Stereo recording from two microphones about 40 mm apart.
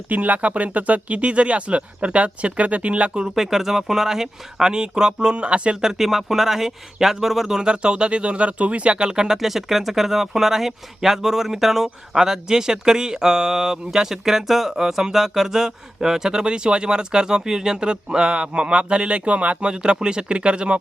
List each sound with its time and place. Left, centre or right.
0.1 s speech: right
3.3 s speech: centre; by 5.7 s right
5.8 s speech: centre
7.7 s speech: right
19.7 s speech: right